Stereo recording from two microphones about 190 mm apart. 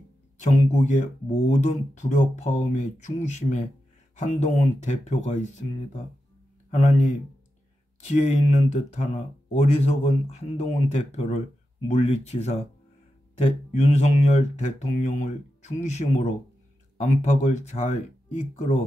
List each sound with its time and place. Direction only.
0.4 s speech: 40° left (ahead or behind)
6.7 s speech: 40° left (ahead or behind)